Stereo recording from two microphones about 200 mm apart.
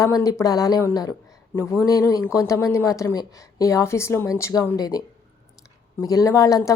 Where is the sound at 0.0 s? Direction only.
15° left (ahead or behind).